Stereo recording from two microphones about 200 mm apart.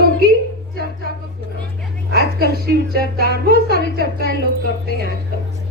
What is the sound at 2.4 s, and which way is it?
Speech, 50° right (ahead or behind).